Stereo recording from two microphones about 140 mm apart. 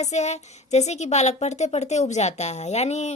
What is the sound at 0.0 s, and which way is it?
A woman's voice, 55° left (ahead or behind).